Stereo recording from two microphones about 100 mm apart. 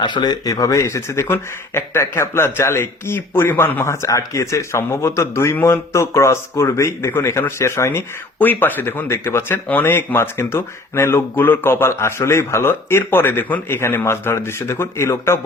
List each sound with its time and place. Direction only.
0.0 s speech: 45° left (ahead or behind); by 8.0 s 30° left (ahead or behind)
8.4 s speech: 20° left (ahead or behind)